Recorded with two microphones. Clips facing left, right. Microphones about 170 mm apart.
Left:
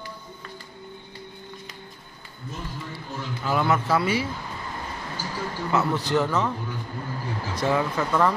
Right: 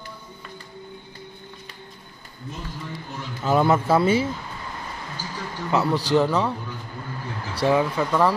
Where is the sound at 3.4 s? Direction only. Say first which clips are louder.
Right 4 dB; 25° right (ahead or behind).